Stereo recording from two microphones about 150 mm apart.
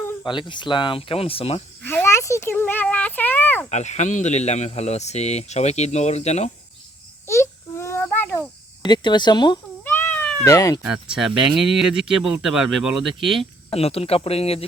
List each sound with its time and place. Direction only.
0.3 s speech: 30° left (ahead or behind)
1.8 s speech: 15° left (ahead or behind)
3.7 s speech: 50° left (ahead or behind)
7.3 s a sound: 20° left (ahead or behind)
8.8 s speech: 30° left (ahead or behind)
9.8 s cat: 10° left (ahead or behind)
10.4 s speech: 20° left (ahead or behind)
10.8 s speech: 5° right (ahead or behind)
13.7 s speech: 40° left (ahead or behind)